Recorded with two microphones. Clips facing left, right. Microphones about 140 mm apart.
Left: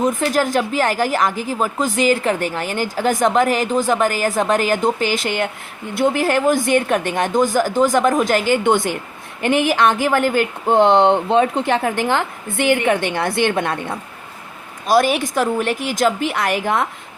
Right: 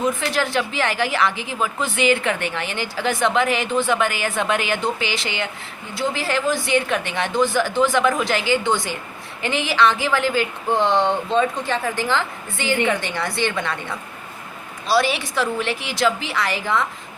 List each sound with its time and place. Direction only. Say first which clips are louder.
0.0 s a woman's voice: left 4 dB; 45° left (ahead or behind)